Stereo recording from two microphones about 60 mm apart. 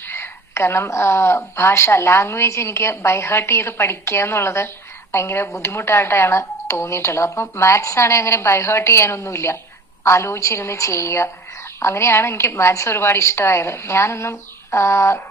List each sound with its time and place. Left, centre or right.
0.1 s a woman's voice: left